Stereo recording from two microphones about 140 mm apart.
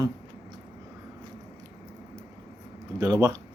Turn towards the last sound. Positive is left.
turn(degrees=-25)  # may be behind; listen again after turning